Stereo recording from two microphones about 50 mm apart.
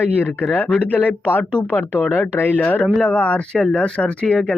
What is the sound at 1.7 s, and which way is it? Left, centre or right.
Speech, left.